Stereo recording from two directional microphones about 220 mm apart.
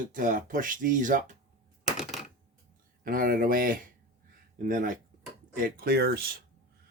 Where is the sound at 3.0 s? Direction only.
40° right (ahead or behind).